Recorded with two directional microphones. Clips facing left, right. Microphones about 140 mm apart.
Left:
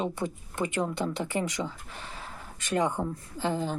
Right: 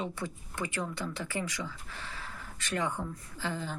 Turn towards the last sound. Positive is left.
turn(degrees=20)  # may be behind; listen again after turning